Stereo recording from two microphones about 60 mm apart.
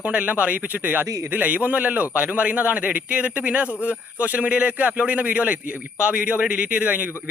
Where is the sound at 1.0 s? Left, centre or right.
Right.